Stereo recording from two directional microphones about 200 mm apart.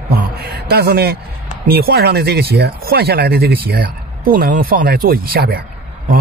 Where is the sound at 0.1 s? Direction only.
50° right (ahead or behind).